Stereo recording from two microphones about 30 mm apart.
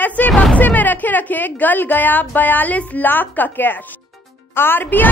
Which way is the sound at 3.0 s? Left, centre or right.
Left.